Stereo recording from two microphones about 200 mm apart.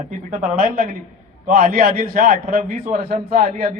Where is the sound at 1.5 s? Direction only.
45° right (ahead or behind).